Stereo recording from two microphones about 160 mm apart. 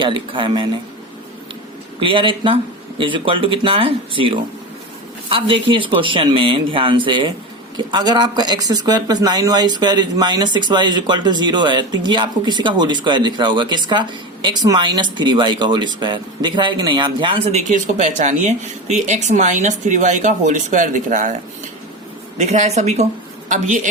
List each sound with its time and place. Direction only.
0.0 s speech: 30° right (ahead or behind)
2.0 s speech: 35° right (ahead or behind)
17.5 s speech: 50° right (ahead or behind)
22.4 s speech: 45° right (ahead or behind)